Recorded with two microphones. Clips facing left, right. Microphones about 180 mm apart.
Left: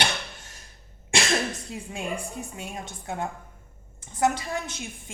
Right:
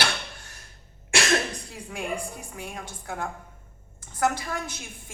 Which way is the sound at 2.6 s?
25° left (ahead or behind).